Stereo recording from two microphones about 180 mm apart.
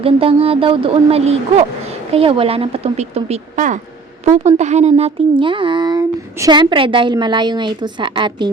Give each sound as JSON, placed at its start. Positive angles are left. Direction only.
{"t": 0.0, "sound": "speech", "side_deg": -30}